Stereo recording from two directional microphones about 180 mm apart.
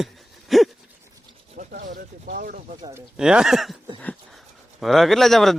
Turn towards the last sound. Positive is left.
turn(degrees=0)  # may be behind; listen again after turning